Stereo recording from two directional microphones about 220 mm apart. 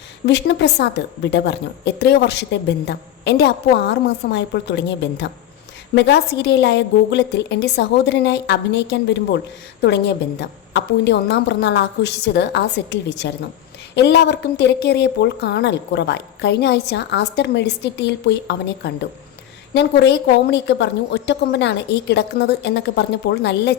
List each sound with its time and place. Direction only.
0.3 s a woman's voice: 50° left (ahead or behind)